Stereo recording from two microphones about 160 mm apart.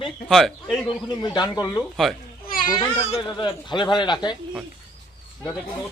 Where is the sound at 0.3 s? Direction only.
Centre (ahead or behind).